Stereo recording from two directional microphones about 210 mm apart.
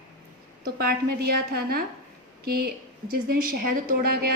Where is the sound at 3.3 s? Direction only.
40° right (ahead or behind).